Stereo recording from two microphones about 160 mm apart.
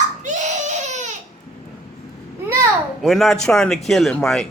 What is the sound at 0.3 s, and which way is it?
Baby cry, 50° right (ahead or behind).